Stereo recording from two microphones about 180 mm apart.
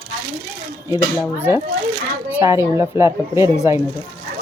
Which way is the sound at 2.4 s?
15° right (ahead or behind).